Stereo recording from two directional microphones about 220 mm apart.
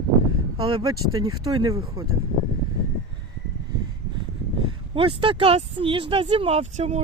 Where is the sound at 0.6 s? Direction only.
25° right (ahead or behind).